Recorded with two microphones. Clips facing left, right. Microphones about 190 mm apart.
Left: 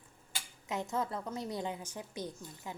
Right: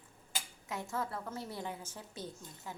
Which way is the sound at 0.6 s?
20° left (ahead or behind).